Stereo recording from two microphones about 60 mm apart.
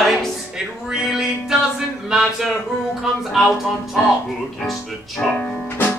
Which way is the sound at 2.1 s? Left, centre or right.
Centre.